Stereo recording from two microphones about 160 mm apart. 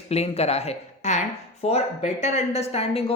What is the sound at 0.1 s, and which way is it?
Speech, 40° left (ahead or behind).